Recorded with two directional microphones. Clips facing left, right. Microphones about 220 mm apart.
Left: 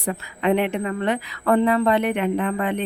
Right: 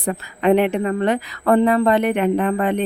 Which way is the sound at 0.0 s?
45° right (ahead or behind).